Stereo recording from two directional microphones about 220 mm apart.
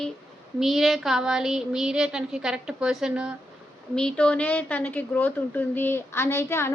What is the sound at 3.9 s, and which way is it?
A woman's voice, 5° left (ahead or behind).